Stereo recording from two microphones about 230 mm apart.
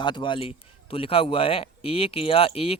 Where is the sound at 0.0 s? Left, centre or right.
Centre.